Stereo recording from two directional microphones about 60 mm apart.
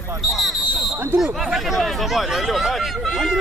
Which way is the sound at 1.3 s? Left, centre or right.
Centre.